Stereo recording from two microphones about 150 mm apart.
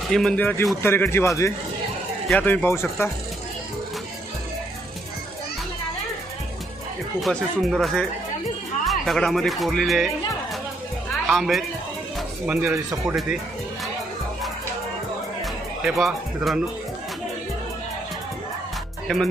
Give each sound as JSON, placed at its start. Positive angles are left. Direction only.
{"t": 0.1, "sound": "speech", "side_deg": 5}
{"t": 2.3, "sound": "speech", "side_deg": 10}
{"t": 7.2, "sound": "speech", "side_deg": 0}
{"t": 11.3, "sound": "speech", "side_deg": 0}
{"t": 12.5, "sound": "speech", "side_deg": -20}
{"t": 13.1, "sound": "speech", "side_deg": 0}
{"t": 15.8, "sound": "speech", "side_deg": 0}
{"t": 19.0, "sound": "speech", "side_deg": 0}